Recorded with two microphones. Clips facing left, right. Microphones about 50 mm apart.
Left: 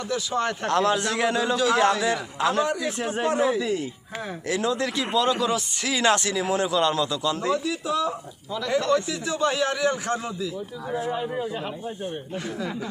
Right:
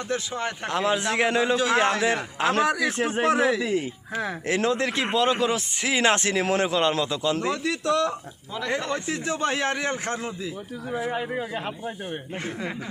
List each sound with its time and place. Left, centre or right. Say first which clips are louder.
0.3 s a man's voice: left 8 dB; centre; by 2.6 s right
2.6 s a man's voice: right 2 dB; right
3.2 s speech: right 1 dB; right
4.4 s speech: right 1 dB; right
7.3 s speech: left 2 dB; right
7.6 s a man's voice: right 2 dB; right
8.8 s speech: left 4 dB; right